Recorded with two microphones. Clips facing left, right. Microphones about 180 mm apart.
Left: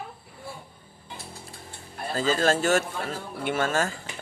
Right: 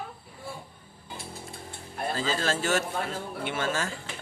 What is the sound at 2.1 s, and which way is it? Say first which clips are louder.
Speech: left 7 dB; 45° left (ahead or behind).